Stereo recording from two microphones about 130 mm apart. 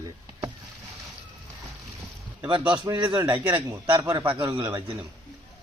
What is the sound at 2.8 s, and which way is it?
A man's voice, 35° right (ahead or behind).